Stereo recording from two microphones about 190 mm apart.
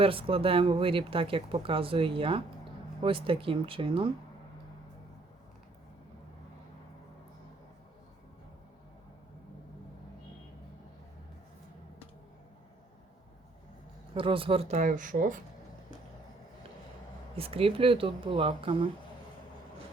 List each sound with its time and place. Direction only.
0.0 s speech: 30° right (ahead or behind)
14.1 s speech: 30° right (ahead or behind); by 15.4 s 45° right (ahead or behind)
17.3 s speech: 30° right (ahead or behind)